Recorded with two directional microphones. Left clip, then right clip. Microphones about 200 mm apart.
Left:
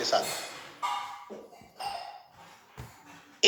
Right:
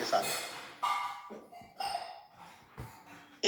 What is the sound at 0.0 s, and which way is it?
Music, 30° left (ahead or behind).